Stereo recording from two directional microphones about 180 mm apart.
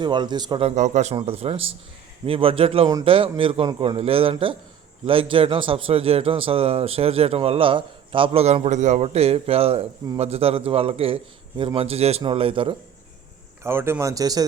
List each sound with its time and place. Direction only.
0.0 s a man's voice: 25° right (ahead or behind)
0.8 s speech: 40° right (ahead or behind)
13.7 s speech: 15° right (ahead or behind)